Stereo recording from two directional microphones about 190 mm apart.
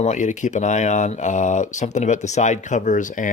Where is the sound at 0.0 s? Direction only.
40° left (ahead or behind).